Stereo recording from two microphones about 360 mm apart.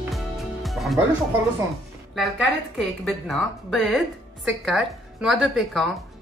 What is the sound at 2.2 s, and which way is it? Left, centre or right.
Speech, centre.